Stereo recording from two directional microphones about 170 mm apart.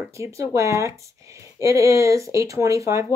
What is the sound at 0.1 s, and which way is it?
Speech, 15° right (ahead or behind).